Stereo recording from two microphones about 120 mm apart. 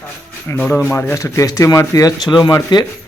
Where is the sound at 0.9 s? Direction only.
25° left (ahead or behind).